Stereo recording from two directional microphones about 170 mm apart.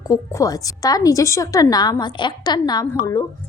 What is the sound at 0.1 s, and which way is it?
A woman's voice, 20° left (ahead or behind).